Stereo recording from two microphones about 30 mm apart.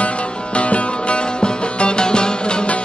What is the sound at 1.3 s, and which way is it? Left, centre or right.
Music, left.